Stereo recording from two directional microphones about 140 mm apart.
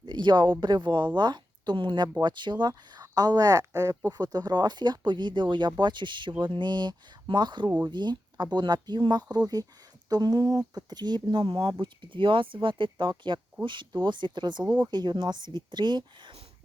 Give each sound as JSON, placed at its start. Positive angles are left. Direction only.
{"t": 0.0, "sound": "speech", "side_deg": -30}